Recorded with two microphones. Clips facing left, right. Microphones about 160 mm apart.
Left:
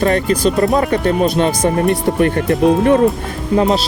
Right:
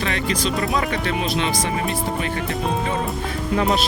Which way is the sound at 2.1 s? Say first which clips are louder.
Left 10 dB; 60° left (ahead or behind).